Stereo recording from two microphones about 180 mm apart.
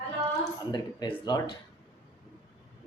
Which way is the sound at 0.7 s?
25° left (ahead or behind).